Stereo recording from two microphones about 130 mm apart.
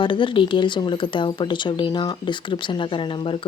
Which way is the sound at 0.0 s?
40° left (ahead or behind).